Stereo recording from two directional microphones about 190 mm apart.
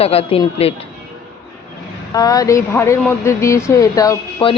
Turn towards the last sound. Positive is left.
turn(degrees=25)  # may be behind; listen again after turning